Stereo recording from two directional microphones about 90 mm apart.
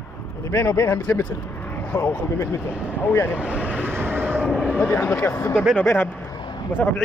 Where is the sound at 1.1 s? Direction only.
20° left (ahead or behind).